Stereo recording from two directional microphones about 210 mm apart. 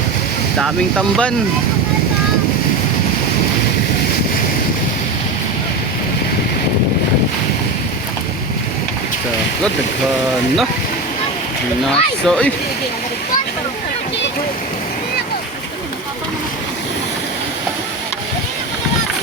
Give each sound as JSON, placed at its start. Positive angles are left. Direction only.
{"t": 0.6, "sound": "speech", "side_deg": 0}
{"t": 11.9, "sound": "speech", "side_deg": 5}